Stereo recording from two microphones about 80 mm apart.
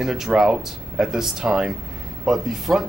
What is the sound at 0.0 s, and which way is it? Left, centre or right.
Speech, centre.